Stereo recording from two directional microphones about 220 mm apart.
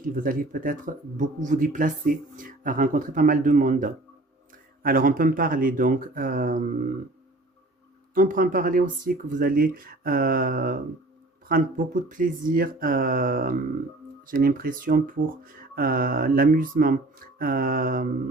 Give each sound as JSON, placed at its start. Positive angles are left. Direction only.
{"t": 0.0, "sound": "speech", "side_deg": -40}
{"t": 8.1, "sound": "speech", "side_deg": -40}